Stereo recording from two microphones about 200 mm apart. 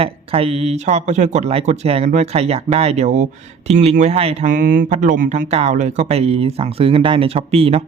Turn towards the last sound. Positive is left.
turn(degrees=-30)  # may be behind; listen again after turning